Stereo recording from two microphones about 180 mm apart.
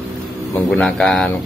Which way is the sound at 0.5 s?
5° left (ahead or behind).